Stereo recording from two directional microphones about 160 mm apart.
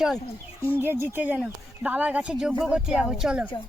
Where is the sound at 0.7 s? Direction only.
15° right (ahead or behind).